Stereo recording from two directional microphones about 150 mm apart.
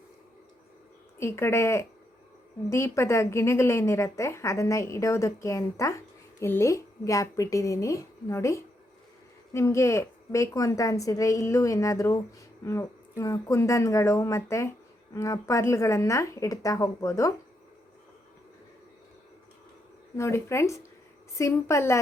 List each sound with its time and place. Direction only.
1.2 s a woman's voice: 15° left (ahead or behind)
20.1 s a woman's voice: 20° left (ahead or behind)